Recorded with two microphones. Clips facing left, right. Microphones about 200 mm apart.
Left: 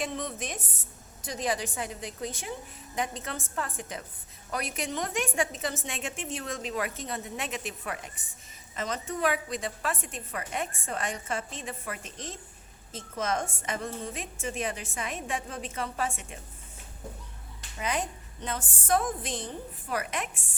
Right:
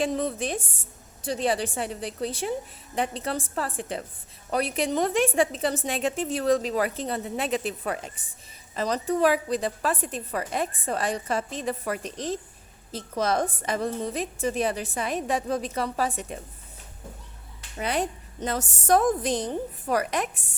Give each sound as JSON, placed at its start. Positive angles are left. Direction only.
{"t": 0.0, "sound": "a woman's voice", "side_deg": -35}
{"t": 17.7, "sound": "a woman's voice", "side_deg": -35}